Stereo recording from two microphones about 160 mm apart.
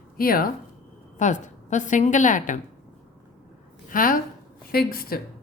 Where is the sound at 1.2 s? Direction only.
50° left (ahead or behind).